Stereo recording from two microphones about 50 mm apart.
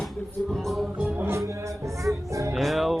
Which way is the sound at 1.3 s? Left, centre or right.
Right.